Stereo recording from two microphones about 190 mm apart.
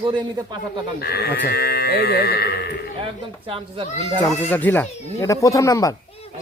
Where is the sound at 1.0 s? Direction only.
55° left (ahead or behind).